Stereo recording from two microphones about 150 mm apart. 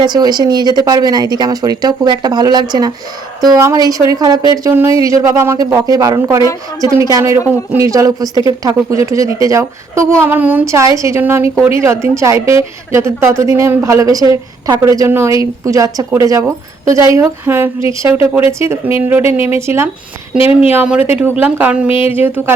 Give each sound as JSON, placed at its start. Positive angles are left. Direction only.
{"t": 0.0, "sound": "a woman's voice", "side_deg": -30}
{"t": 6.4, "sound": "a woman's voice", "side_deg": 25}
{"t": 6.9, "sound": "a woman's voice", "side_deg": -20}